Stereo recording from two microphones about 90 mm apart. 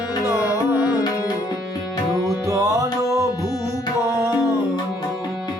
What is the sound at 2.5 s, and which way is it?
Music, 35° right (ahead or behind).